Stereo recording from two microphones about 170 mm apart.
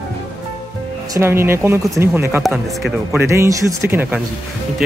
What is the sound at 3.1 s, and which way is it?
Speech, 15° right (ahead or behind).